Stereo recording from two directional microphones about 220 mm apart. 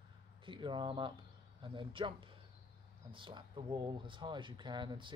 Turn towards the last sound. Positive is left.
turn(degrees=-20)  # may be behind; listen again after turning